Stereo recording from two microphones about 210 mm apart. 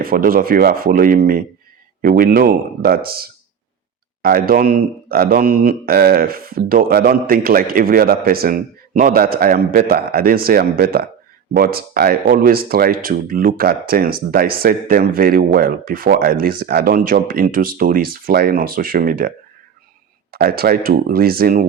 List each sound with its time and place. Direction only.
0.0 s speech: 45° right (ahead or behind)
20.3 s speech: 45° right (ahead or behind)